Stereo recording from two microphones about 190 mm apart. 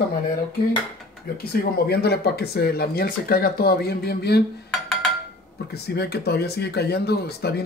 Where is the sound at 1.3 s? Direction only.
55° left (ahead or behind).